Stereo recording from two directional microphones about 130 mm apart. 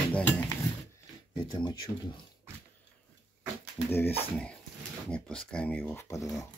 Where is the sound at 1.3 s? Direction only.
35° left (ahead or behind).